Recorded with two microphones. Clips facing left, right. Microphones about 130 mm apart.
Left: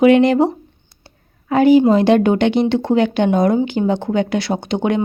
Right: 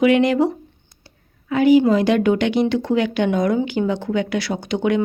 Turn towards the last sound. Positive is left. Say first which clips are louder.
# left 2 dB
turn(degrees=30)  # may be behind; listen again after turning